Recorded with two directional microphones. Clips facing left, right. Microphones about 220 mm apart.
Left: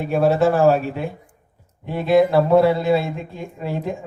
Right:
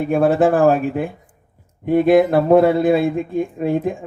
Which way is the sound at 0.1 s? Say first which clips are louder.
Right 2 dB; 50° right (ahead or behind).